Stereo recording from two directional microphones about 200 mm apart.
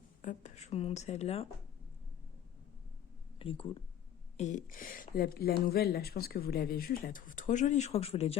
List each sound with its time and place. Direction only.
0.2 s speech: 40° left (ahead or behind)
3.3 s speech: 25° left (ahead or behind)
4.4 s speech: 35° left (ahead or behind)